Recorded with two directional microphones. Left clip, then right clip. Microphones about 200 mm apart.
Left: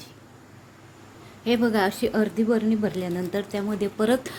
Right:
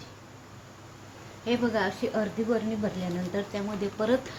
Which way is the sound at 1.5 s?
55° left (ahead or behind).